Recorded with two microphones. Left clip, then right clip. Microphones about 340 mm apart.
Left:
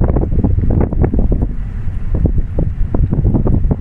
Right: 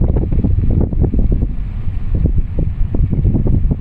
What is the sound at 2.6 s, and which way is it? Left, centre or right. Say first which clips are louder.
Wind: left 4 dB; left.